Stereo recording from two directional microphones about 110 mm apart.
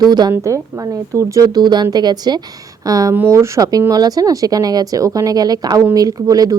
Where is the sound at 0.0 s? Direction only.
40° right (ahead or behind).